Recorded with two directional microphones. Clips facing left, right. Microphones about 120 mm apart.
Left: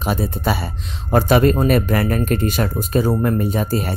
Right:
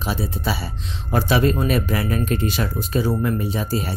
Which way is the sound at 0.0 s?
50° left (ahead or behind).